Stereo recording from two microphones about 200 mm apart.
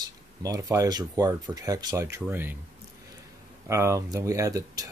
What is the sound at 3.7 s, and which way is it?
Speech, 15° right (ahead or behind).